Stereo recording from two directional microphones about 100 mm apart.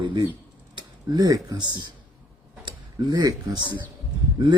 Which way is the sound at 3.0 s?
40° right (ahead or behind).